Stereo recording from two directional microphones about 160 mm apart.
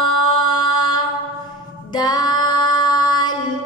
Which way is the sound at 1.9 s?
25° left (ahead or behind).